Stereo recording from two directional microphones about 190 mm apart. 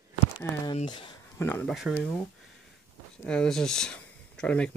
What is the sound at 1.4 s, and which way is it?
Speech, 10° left (ahead or behind).